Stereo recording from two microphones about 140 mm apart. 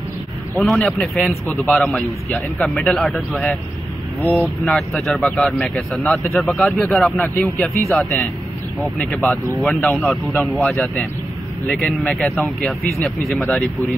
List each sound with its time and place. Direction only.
0.6 s a man's voice: 5° left (ahead or behind)
4.2 s speech: 15° left (ahead or behind)
4.6 s a man's voice: centre (ahead or behind)
9.8 s speech: 15° left (ahead or behind)
10.2 s a man's voice: centre (ahead or behind)